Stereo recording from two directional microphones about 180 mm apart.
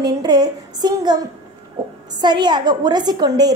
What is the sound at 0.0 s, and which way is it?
A woman's voice, 20° right (ahead or behind).